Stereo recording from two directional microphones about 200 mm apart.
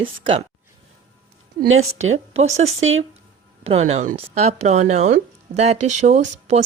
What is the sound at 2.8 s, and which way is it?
Speech, 80° right.